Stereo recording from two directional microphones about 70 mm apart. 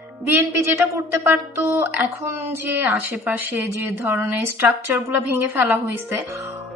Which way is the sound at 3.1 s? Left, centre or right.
Right.